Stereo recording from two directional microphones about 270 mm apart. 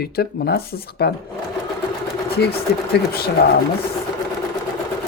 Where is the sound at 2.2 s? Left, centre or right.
Left.